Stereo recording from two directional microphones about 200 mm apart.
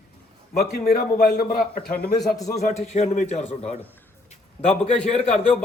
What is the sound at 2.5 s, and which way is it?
A man's voice, 35° left (ahead or behind).